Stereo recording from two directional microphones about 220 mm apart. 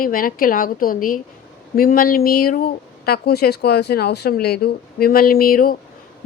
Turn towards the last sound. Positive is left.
turn(degrees=40)  # may be behind; listen again after turning